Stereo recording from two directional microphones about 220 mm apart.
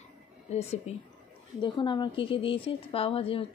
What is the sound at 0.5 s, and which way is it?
A woman's voice, 30° left (ahead or behind).